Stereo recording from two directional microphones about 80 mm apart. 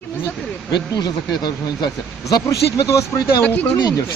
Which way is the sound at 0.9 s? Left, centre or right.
Left.